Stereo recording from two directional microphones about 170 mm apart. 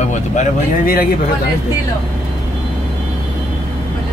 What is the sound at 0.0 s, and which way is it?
Speech, 45° left (ahead or behind).